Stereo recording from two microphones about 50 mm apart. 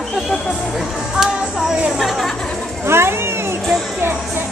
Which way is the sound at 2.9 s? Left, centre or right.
Right.